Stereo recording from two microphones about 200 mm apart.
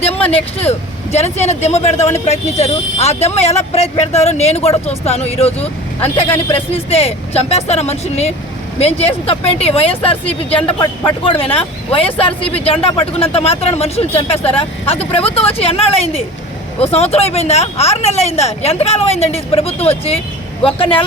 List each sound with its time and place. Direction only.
0.3 s speech: 30° left (ahead or behind)